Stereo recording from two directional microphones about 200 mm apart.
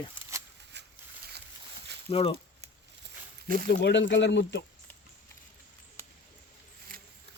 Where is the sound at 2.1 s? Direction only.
30° left (ahead or behind).